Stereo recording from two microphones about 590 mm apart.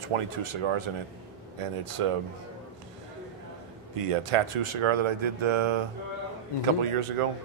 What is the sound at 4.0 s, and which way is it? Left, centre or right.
Speech, right.